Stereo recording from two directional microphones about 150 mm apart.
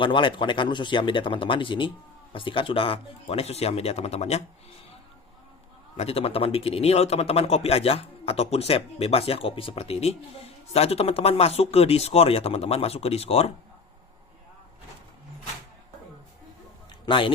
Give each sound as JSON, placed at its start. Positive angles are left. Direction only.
{"t": 0.0, "sound": "speech", "side_deg": 35}
{"t": 6.0, "sound": "speech", "side_deg": 40}
{"t": 17.1, "sound": "speech", "side_deg": 35}